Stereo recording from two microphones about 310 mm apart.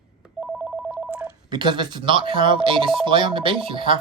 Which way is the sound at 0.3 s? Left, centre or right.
Centre.